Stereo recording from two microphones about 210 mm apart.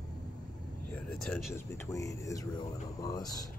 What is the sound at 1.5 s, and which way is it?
Speech, 15° left (ahead or behind).